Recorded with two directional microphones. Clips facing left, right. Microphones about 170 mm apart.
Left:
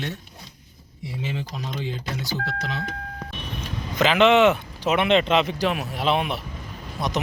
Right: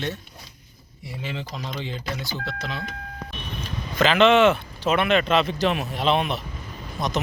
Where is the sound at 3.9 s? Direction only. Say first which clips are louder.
Even; 15° left (ahead or behind).